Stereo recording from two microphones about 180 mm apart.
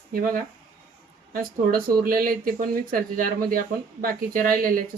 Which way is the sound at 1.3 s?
55° right (ahead or behind).